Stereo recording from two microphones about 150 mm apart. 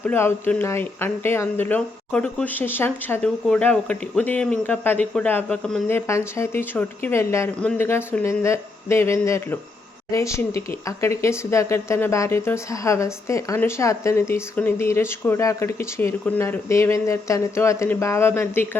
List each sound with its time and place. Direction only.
0.0 s speech: 15° left (ahead or behind)
5.9 s speech: 20° left (ahead or behind)